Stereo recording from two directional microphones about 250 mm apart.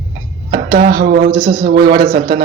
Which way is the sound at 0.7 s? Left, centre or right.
Right.